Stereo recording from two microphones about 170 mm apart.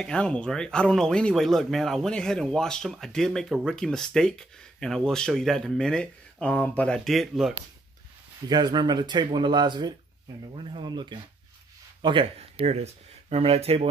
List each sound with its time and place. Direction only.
0.0 s speech: 5° left (ahead or behind)
8.5 s speech: 25° right (ahead or behind)